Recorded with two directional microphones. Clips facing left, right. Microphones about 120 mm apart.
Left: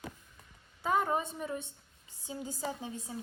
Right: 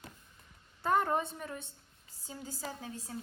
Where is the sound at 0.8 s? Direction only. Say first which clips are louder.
Even; 5° left (ahead or behind).